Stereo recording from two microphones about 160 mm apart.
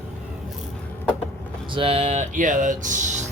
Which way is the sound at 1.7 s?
35° right (ahead or behind).